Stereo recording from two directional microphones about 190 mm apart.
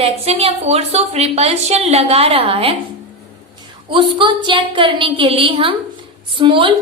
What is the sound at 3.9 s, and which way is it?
A woman's voice, 25° right (ahead or behind).